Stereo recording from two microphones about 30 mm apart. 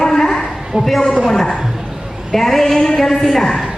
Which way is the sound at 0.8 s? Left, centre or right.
Centre.